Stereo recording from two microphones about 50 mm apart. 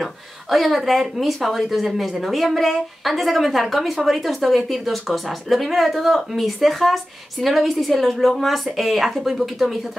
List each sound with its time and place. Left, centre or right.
0.0 s speech: centre